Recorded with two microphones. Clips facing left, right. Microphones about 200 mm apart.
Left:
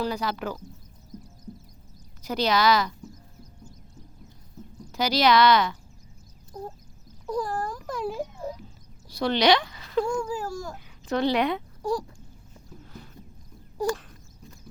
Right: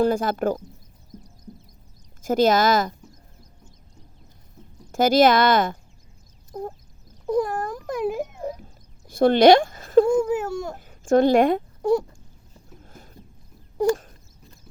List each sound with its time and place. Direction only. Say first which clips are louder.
0.0 s speech: right 8 dB; 50° right (ahead or behind)
2.2 s speech: right 5 dB; 50° right (ahead or behind)
4.9 s speech: right 6 dB; 50° right (ahead or behind)
7.3 s a sound: right 6 dB; 20° right (ahead or behind)
7.9 s speech: right 5 dB; 20° right (ahead or behind)
8.5 s a sound: even; 50° right (ahead or behind)
10.1 s speech: right 8 dB; 20° right (ahead or behind)
11.0 s speech: right 8 dB; 50° right (ahead or behind)
11.8 s speech: right 8 dB; 25° right (ahead or behind)
12.8 s a sound: left 3 dB; 45° right (ahead or behind)